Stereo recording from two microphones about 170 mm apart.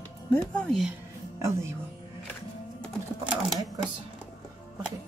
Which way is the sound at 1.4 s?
15° right (ahead or behind).